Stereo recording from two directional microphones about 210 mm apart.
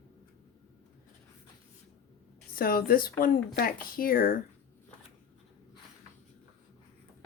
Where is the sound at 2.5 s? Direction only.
45° left (ahead or behind).